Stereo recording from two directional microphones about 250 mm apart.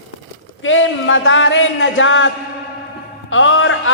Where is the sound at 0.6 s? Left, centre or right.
Left.